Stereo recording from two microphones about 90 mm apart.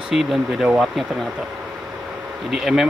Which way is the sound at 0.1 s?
5° right (ahead or behind).